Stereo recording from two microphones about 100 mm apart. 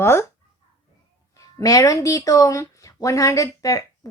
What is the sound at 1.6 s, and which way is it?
Speech, 35° left (ahead or behind).